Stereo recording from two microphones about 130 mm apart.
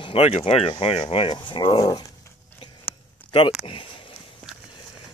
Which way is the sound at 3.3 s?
40° left (ahead or behind).